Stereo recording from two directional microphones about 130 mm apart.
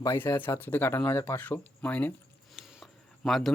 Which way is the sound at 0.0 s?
20° left (ahead or behind).